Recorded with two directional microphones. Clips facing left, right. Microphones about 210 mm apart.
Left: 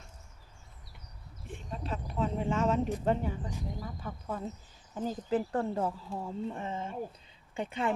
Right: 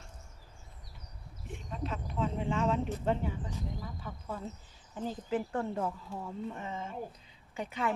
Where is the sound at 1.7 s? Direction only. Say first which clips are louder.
Even; 35° left (ahead or behind).